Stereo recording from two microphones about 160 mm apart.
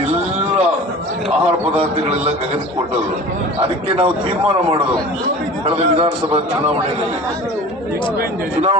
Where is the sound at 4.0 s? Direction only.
35° right (ahead or behind).